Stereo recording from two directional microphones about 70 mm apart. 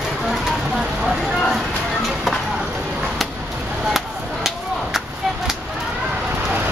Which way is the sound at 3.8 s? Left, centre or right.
Centre.